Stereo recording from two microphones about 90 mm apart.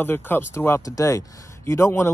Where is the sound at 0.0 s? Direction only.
25° left (ahead or behind).